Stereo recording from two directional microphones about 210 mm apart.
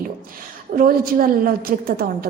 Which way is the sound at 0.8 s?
45° right (ahead or behind).